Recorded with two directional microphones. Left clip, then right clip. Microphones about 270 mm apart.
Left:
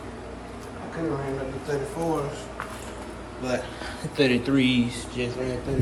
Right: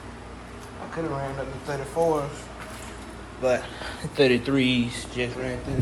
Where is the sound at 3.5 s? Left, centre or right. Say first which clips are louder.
Right 5 dB; centre.